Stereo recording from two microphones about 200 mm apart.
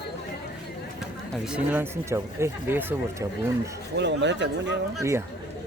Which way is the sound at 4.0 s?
60° right (ahead or behind).